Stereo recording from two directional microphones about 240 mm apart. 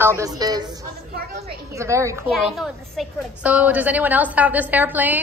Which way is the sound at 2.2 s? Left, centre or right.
Centre.